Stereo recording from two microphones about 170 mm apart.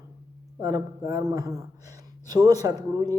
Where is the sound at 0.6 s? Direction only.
20° right (ahead or behind).